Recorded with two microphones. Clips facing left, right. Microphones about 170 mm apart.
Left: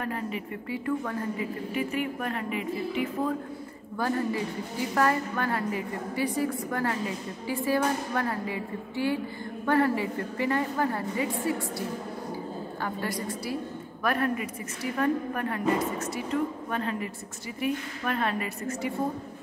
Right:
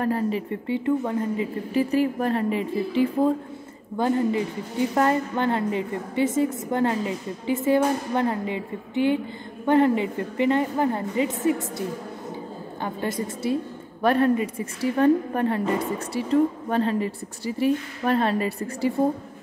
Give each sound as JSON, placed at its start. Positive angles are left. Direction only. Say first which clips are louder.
{"t": 0.0, "sound": "a woman's voice", "louder": "right 8 dB", "side_deg": -35}
{"t": 12.8, "sound": "a woman's voice", "louder": "right 5 dB", "side_deg": -25}